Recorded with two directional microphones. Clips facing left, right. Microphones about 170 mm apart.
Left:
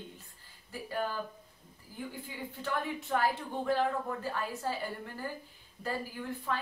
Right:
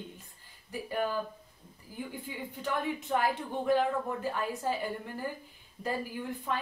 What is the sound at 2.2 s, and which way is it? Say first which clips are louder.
A woman's voice: right 2 dB; 20° right (ahead or behind).